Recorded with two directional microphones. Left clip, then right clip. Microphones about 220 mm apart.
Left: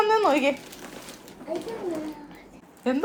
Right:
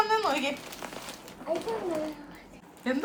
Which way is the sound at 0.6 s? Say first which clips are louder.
Right 1 dB; 10° left (ahead or behind).